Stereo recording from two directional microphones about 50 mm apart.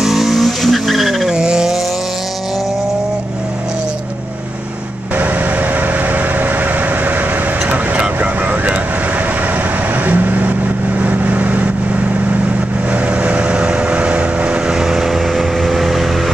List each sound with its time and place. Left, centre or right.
0.0 s vehicle: centre
1.3 s vehicle: centre
5.1 s vehicle: right
10.0 s vehicle: right
14.7 s vehicle: centre